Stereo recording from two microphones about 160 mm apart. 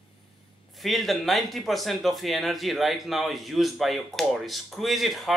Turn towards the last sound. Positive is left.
turn(degrees=0)  # may be behind; listen again after turning